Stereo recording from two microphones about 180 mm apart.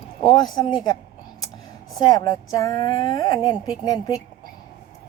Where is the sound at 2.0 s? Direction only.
20° left (ahead or behind).